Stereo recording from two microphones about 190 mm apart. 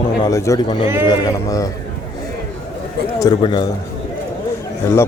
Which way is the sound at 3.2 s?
25° left (ahead or behind).